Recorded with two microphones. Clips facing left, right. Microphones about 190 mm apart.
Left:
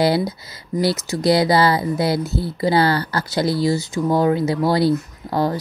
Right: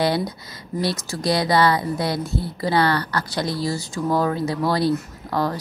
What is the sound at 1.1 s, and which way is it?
A woman's voice, 25° left (ahead or behind).